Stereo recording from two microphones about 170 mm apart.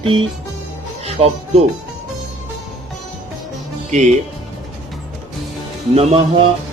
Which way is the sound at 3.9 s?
45° right (ahead or behind).